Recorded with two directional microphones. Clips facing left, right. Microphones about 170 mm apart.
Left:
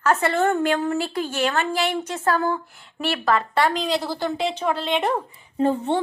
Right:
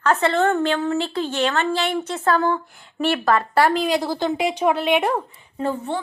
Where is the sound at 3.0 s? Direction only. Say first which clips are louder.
Right 3 dB; centre (ahead or behind).